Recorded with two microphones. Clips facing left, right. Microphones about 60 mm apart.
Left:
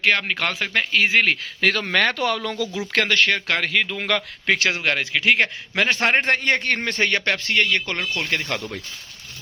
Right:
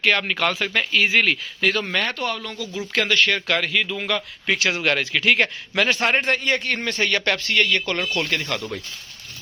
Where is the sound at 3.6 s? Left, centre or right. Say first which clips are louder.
Left 1 dB; left.